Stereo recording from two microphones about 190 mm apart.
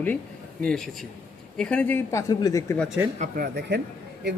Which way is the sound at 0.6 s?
5° left (ahead or behind).